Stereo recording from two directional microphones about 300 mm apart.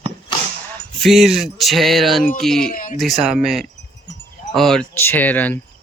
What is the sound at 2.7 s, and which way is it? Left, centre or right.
Speech, left.